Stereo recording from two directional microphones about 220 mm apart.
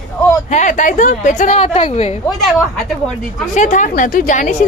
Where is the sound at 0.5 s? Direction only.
35° left (ahead or behind).